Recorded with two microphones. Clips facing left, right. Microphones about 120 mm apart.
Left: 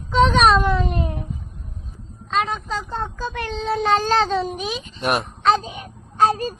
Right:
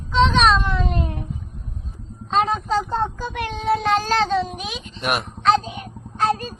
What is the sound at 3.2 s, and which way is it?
Speech, 15° right (ahead or behind).